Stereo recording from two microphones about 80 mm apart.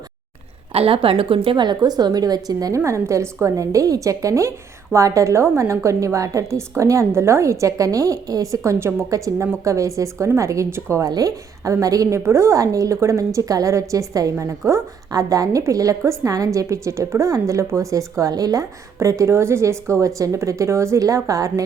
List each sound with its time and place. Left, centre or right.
1.1 s a woman's voice: right
11.0 s a woman's voice: right